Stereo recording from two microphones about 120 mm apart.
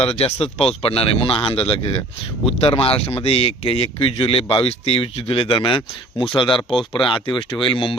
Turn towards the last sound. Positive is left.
turn(degrees=45)  # may be behind; listen again after turning